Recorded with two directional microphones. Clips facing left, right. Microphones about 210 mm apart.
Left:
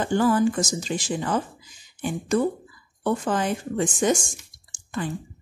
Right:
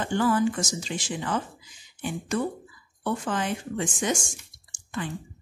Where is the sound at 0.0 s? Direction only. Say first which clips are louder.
Left 3 dB; 40° left (ahead or behind).